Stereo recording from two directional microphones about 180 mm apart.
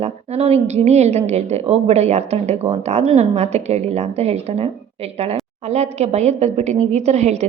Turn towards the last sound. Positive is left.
turn(degrees=-40)  # may be behind; listen again after turning